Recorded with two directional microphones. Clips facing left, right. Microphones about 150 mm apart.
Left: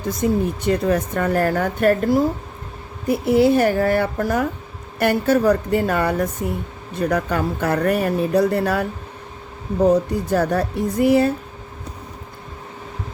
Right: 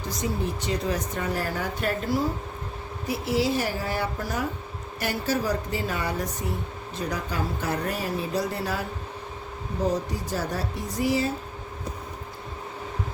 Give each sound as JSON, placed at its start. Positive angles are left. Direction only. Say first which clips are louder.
{"t": 0.1, "sound": "speech", "louder": "left 9 dB", "side_deg": 55}